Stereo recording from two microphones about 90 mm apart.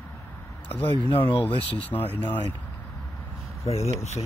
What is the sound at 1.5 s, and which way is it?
Speech, 90° left.